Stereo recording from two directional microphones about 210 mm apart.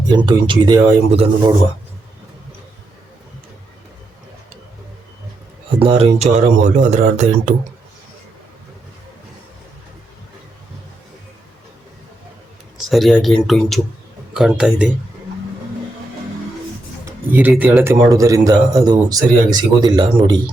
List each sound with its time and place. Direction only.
0.1 s speech: 20° right (ahead or behind)
5.8 s speech: 30° right (ahead or behind)
12.7 s speech: centre (ahead or behind)
17.1 s speech: 10° right (ahead or behind)